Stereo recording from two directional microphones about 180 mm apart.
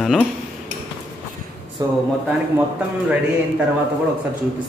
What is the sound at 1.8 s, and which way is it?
Speech, 20° right (ahead or behind).